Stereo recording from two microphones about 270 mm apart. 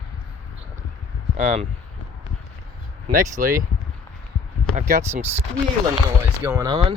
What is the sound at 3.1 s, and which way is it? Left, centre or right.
Speech, right.